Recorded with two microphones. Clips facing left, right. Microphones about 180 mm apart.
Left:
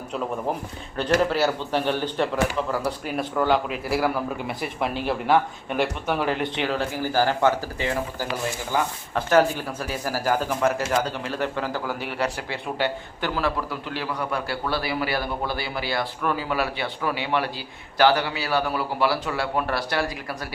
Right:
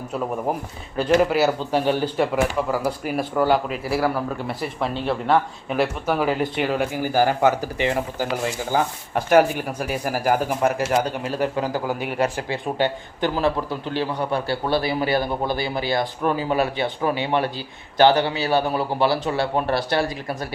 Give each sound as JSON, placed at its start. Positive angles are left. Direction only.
{"t": 0.9, "sound": "a man's voice", "side_deg": -10}